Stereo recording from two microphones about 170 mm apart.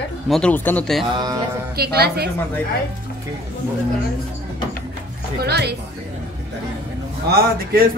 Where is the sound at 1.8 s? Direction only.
65° right (ahead or behind).